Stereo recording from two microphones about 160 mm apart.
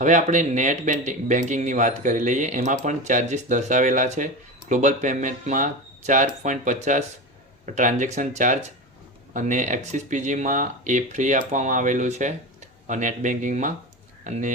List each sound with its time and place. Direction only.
0.0 s speech: 50° right (ahead or behind)